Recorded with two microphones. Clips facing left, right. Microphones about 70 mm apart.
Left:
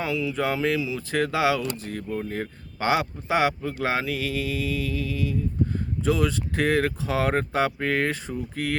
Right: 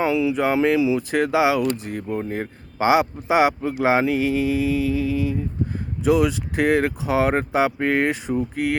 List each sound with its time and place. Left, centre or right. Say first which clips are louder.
0.0 s speech: right 6 dB; right